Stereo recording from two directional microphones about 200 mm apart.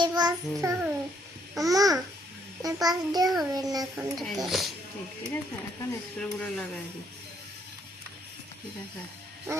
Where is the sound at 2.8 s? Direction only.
20° right (ahead or behind).